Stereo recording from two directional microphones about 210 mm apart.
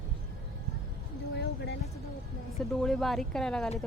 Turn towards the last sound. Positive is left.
turn(degrees=0)  # may be behind; listen again after turning